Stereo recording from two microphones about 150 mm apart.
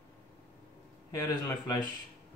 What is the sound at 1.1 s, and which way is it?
Speech, 20° left (ahead or behind).